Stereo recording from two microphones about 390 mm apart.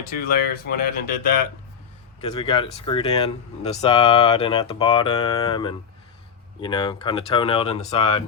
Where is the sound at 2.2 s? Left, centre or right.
Centre.